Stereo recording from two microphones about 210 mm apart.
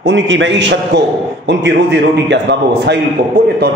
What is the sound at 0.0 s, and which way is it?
A man's voice, 65° right (ahead or behind).